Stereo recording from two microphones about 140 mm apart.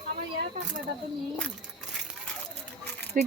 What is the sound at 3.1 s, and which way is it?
Speech, 70° right (ahead or behind).